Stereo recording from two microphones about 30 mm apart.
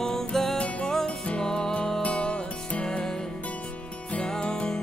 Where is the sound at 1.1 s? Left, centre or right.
Left.